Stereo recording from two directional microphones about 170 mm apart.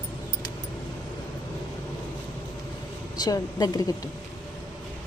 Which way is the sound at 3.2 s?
20° left (ahead or behind).